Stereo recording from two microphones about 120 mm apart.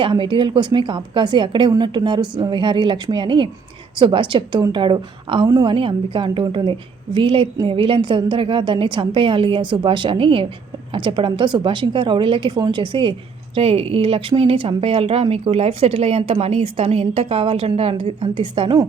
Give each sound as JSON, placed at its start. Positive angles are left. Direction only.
{"t": 0.0, "sound": "a woman's voice", "side_deg": -45}